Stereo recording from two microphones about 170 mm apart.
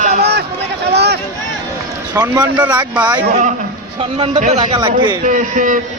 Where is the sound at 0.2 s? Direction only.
70° right (ahead or behind).